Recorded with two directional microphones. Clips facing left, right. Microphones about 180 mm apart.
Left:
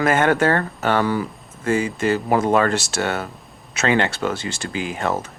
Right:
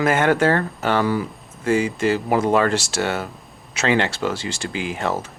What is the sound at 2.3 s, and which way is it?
Speech, 50° left (ahead or behind).